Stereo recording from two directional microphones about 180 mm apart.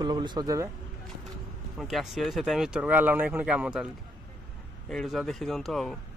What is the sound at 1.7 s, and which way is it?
Speech, centre (ahead or behind).